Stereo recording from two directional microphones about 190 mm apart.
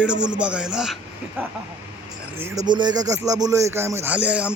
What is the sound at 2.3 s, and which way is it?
Speech, 15° right (ahead or behind).